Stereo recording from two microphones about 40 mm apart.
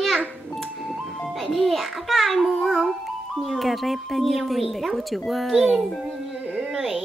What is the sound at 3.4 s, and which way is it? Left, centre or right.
Speech, centre.